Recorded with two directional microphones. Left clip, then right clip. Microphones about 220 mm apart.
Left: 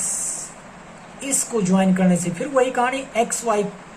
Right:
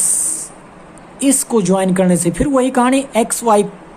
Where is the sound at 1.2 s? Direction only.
50° right (ahead or behind).